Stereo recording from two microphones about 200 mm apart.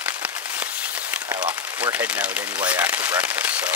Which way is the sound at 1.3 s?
20° right (ahead or behind).